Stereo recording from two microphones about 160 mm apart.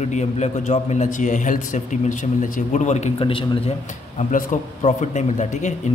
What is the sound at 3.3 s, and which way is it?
Speech, 35° left (ahead or behind).